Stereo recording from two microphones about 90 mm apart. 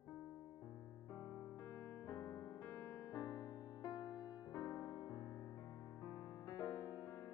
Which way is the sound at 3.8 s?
50° left (ahead or behind).